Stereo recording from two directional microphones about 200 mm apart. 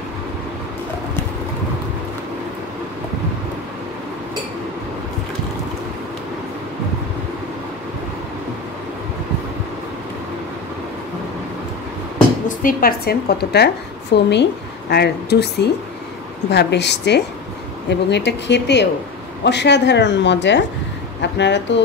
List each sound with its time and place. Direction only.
12.4 s a woman's voice: 45° left (ahead or behind); by 21.8 s 60° left (ahead or behind)